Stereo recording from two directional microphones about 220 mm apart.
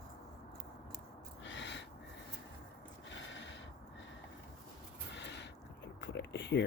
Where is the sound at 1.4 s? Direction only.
55° left (ahead or behind).